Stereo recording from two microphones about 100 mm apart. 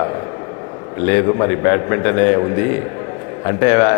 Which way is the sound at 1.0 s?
30° left (ahead or behind).